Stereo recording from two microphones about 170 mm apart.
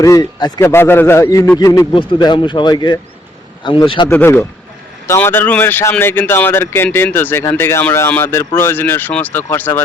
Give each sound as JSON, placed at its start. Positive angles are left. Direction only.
{"t": 0.0, "sound": "speech", "side_deg": 20}
{"t": 4.1, "sound": "speech", "side_deg": 10}